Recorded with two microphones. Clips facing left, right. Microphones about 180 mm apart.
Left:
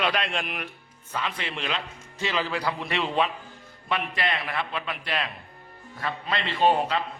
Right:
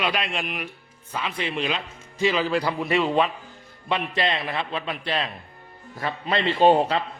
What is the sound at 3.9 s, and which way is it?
A man's voice, 25° right (ahead or behind).